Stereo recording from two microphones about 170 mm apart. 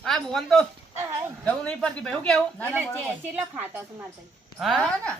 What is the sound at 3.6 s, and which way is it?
Speech, 10° right (ahead or behind).